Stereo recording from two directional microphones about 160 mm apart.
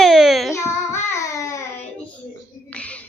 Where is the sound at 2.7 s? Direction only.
10° left (ahead or behind).